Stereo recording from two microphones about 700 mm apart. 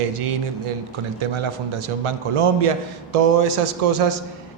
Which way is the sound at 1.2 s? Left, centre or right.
Right.